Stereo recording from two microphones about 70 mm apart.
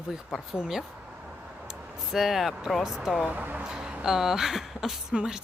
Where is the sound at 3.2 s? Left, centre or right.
Right.